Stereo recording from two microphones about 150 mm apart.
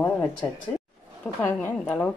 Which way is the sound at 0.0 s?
15° left (ahead or behind).